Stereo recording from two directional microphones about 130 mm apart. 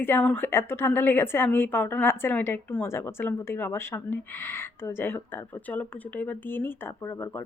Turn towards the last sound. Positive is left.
turn(degrees=20)  # may be behind; listen again after turning